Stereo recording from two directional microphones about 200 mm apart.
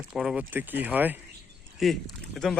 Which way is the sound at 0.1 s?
Centre (ahead or behind).